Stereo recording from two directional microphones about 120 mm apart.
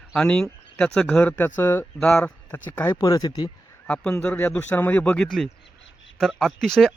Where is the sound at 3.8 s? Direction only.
10° left (ahead or behind).